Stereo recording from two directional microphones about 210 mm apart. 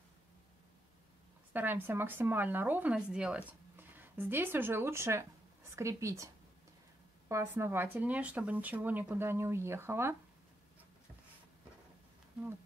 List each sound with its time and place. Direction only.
1.5 s speech: 10° right (ahead or behind)